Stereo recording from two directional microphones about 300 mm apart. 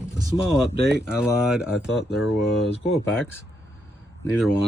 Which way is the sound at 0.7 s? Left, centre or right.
Right.